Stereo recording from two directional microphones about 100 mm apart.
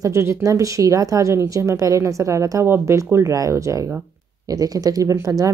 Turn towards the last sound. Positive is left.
turn(degrees=-30)  # may be behind; listen again after turning